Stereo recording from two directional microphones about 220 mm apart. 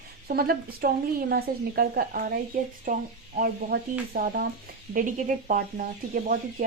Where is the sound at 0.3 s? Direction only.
45° right (ahead or behind).